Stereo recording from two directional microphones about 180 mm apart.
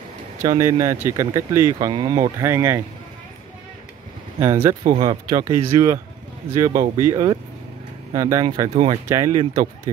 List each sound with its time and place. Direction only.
0.4 s speech: 15° right (ahead or behind)
4.4 s speech: 15° right (ahead or behind)
4.8 s speech: 25° right (ahead or behind)